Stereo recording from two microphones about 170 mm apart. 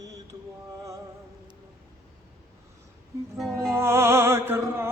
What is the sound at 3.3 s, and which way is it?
Music, centre (ahead or behind).